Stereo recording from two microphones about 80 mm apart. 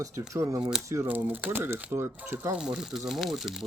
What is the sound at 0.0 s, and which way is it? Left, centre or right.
Speech, right.